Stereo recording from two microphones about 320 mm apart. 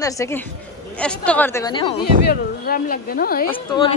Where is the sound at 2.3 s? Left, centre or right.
Left.